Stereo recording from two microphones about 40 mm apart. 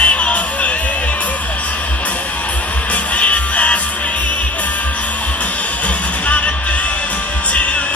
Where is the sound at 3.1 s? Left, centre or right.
Left.